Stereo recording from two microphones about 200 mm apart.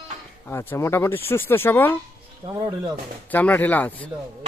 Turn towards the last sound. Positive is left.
turn(degrees=10)  # may be behind; listen again after turning